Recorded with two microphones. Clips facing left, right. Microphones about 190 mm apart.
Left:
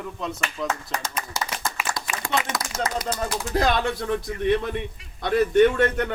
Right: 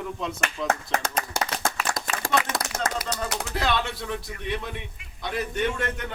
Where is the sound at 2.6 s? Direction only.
60° right (ahead or behind).